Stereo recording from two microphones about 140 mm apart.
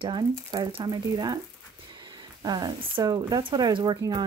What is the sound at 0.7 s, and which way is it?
Speech, 35° right (ahead or behind).